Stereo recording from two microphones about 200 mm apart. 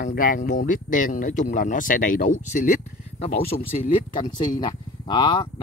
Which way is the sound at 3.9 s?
25° left (ahead or behind).